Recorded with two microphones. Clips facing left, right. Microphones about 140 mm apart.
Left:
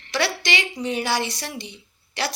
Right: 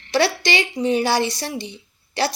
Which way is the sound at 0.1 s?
30° right (ahead or behind).